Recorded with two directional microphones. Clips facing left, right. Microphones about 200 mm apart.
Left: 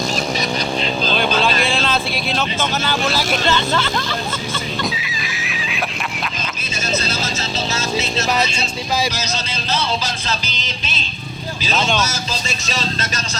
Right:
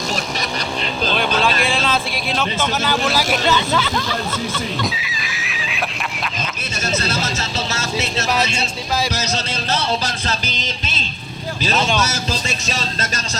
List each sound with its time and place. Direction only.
1.1 s vehicle: centre (ahead or behind)
3.7 s speech: 5° right (ahead or behind)
4.8 s a sound: centre (ahead or behind)
10.2 s music: 50° right (ahead or behind)
11.7 s speech: centre (ahead or behind)